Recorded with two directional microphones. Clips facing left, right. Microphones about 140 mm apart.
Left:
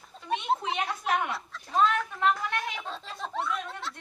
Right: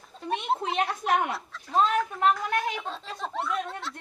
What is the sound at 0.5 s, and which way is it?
Speech, centre (ahead or behind).